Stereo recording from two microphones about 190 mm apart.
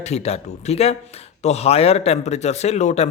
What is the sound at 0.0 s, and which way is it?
Speech, 35° left (ahead or behind).